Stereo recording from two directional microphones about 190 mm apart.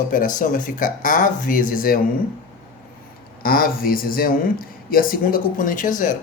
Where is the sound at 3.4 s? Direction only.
50° left (ahead or behind).